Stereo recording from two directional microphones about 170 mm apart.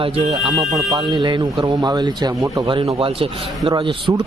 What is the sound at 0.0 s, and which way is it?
A man's voice, 30° right (ahead or behind).